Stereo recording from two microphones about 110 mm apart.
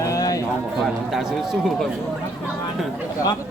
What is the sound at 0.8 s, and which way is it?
A man's voice, centre (ahead or behind).